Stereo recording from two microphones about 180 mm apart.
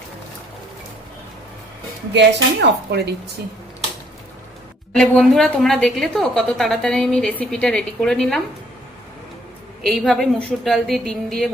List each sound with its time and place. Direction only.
2.1 s speech: 70° right (ahead or behind)
4.9 s a woman's voice: 5° left (ahead or behind)
9.8 s a woman's voice: centre (ahead or behind)